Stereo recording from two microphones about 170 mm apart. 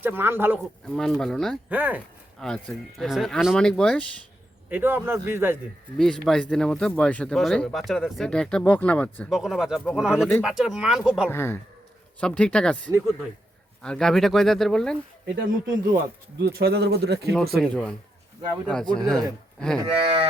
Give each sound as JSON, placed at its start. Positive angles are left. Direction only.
{"t": 0.0, "sound": "a man's voice", "side_deg": -10}
{"t": 0.9, "sound": "speech", "side_deg": 5}
{"t": 1.7, "sound": "a man's voice", "side_deg": -10}
{"t": 2.4, "sound": "speech", "side_deg": 5}
{"t": 4.7, "sound": "a man's voice", "side_deg": -10}
{"t": 6.2, "sound": "speech", "side_deg": 5}
{"t": 11.3, "sound": "speech", "side_deg": 15}
{"t": 15.4, "sound": "speech", "side_deg": -55}
{"t": 17.6, "sound": "speech", "side_deg": 5}
{"t": 18.9, "sound": "speech", "side_deg": 5}
{"t": 19.5, "sound": "cattle", "side_deg": 5}
{"t": 19.9, "sound": "cattle", "side_deg": -35}